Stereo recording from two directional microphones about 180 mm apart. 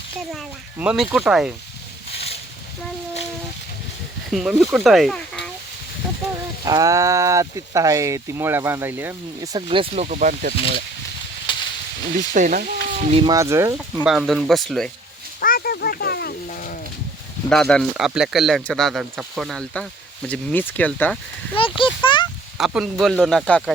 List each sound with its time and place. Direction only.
0.8 s speech: 5° right (ahead or behind)
2.1 s a sound: 35° left (ahead or behind)
4.3 s speech: centre (ahead or behind)
6.7 s speech: 20° right (ahead or behind)
9.6 s speech: 30° right (ahead or behind); by 10.8 s 50° right (ahead or behind)
11.5 s a sound: 25° left (ahead or behind)
12.3 s speech: 50° right (ahead or behind)
13.2 s speech: 15° right (ahead or behind)
14.0 s speech: centre (ahead or behind)
15.4 s a sound: 55° left (ahead or behind)
16.5 s livestock: 50° left (ahead or behind)
17.5 s speech: 5° left (ahead or behind)
21.5 s a sound: 30° left (ahead or behind)
22.5 s speech: 5° right (ahead or behind)